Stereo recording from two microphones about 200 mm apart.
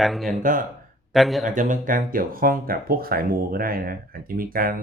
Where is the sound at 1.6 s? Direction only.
40° right (ahead or behind).